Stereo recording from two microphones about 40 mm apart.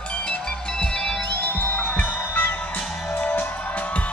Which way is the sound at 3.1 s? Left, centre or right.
Left.